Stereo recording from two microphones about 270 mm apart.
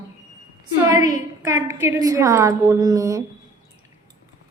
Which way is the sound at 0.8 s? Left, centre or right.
Centre.